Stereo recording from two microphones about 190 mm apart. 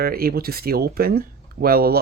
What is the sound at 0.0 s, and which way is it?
Speech, 50° right (ahead or behind).